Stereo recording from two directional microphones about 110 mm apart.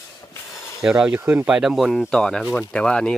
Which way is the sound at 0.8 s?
5° right (ahead or behind).